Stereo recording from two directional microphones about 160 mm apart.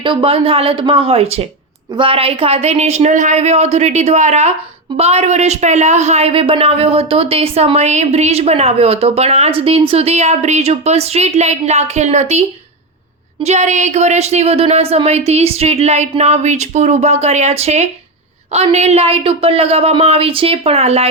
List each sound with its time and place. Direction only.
0.0 s speech: 30° right (ahead or behind)